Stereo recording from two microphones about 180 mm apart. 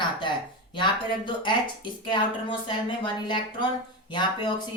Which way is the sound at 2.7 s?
25° left (ahead or behind).